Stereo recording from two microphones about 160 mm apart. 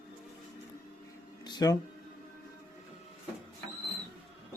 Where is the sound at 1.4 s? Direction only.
25° left (ahead or behind).